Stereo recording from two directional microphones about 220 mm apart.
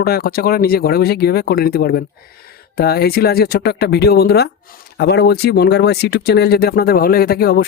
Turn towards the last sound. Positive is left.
turn(degrees=45)  # may be behind; listen again after turning